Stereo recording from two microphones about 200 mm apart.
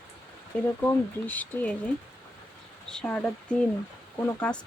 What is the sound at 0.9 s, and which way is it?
Speech, 10° left (ahead or behind).